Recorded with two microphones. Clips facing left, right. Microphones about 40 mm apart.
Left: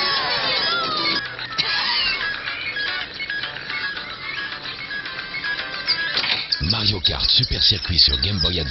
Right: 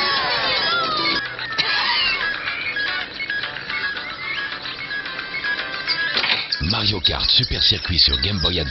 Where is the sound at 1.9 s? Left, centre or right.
Centre.